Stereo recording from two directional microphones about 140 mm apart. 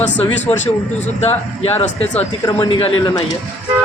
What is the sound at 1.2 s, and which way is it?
A man's voice, 50° left (ahead or behind).